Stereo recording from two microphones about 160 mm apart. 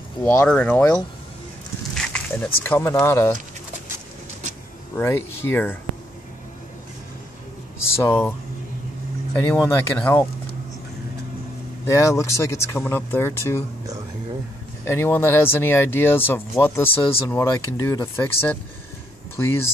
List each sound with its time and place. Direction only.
0.2 s speech: 10° left (ahead or behind)
2.0 s speech: 5° left (ahead or behind)
4.9 s speech: 15° left (ahead or behind)
8.0 s speech: 15° left (ahead or behind)
9.6 s speech: 15° left (ahead or behind)
11.9 s speech: 20° left (ahead or behind)
14.9 s speech: 15° left (ahead or behind)